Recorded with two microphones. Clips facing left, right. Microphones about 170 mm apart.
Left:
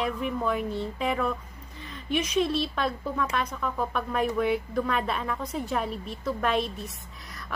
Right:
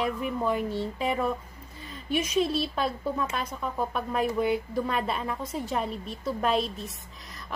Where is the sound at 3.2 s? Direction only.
30° right (ahead or behind).